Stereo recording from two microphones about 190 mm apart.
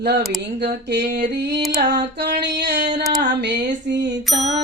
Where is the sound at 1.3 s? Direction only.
65° right (ahead or behind).